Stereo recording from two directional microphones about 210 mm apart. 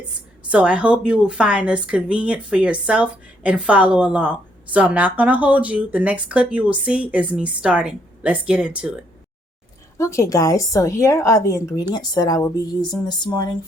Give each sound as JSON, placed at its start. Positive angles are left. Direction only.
{"t": 0.4, "sound": "a woman's voice", "side_deg": -5}
{"t": 10.0, "sound": "a woman's voice", "side_deg": 15}